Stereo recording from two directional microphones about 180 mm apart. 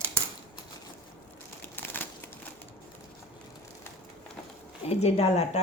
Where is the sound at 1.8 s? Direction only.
10° left (ahead or behind).